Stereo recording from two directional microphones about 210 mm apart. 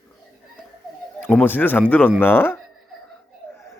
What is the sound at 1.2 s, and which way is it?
A woman's voice, 10° left (ahead or behind).